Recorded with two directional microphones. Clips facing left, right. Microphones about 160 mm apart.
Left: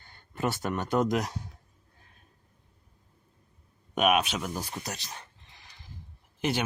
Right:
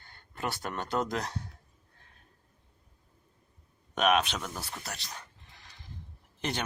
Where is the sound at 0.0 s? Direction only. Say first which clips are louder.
Left 5 dB; 20° left (ahead or behind).